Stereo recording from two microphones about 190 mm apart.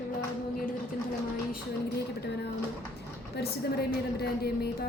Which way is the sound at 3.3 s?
55° left (ahead or behind).